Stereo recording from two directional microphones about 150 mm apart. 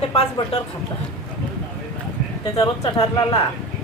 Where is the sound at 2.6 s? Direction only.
30° left (ahead or behind).